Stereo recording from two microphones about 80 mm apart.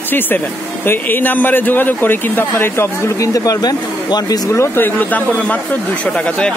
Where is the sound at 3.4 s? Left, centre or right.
Left.